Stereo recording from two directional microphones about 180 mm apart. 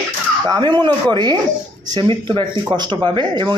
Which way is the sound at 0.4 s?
25° right (ahead or behind).